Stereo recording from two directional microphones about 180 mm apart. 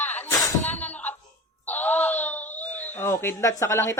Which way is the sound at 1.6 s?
10° left (ahead or behind).